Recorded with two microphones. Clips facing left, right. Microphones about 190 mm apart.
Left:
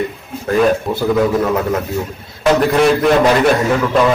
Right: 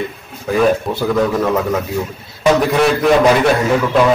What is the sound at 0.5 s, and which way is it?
A man's voice, centre (ahead or behind).